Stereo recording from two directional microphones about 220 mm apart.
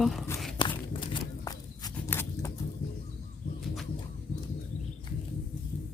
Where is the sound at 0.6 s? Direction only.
20° left (ahead or behind).